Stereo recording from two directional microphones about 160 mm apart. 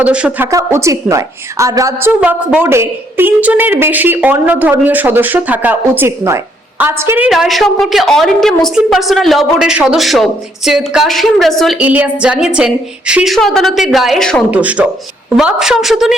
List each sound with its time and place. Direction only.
0.0 s a woman's voice: 5° right (ahead or behind)
0.5 s a woman's voice: 20° right (ahead or behind)
7.3 s a woman's voice: centre (ahead or behind)
11.8 s a woman's voice: 10° right (ahead or behind)
14.5 s a woman's voice: 10° right (ahead or behind)